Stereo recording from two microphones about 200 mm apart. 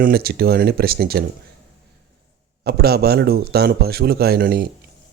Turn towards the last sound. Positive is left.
turn(degrees=-50)  # may be behind; listen again after turning